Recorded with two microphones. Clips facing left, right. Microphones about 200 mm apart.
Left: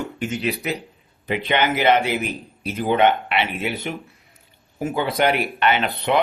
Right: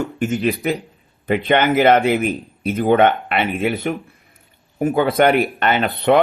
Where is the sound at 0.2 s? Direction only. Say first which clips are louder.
Right 6 dB; 50° right (ahead or behind).